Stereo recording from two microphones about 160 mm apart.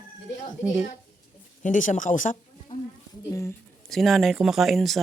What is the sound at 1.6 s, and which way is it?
Speech, 55° left (ahead or behind).